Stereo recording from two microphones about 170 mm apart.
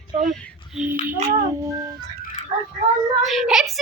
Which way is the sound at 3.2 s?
Centre (ahead or behind).